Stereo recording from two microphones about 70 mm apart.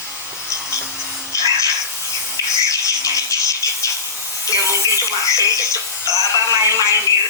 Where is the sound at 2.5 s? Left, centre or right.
Left.